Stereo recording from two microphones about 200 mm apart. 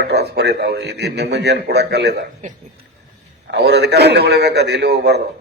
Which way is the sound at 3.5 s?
55° right (ahead or behind).